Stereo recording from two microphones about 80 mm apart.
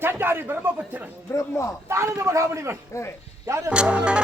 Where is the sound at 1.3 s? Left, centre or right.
Left.